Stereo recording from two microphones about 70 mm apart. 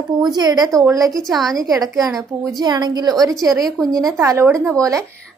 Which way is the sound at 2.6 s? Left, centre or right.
Right.